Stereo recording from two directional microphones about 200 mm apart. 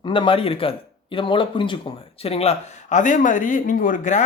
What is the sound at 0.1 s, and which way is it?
Speech, 25° left (ahead or behind).